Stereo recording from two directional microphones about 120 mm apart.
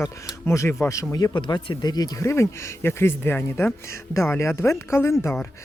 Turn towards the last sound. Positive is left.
turn(degrees=20)  # may be behind; listen again after turning